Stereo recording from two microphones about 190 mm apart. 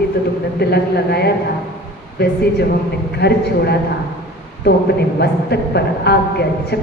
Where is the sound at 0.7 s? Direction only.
60° left (ahead or behind).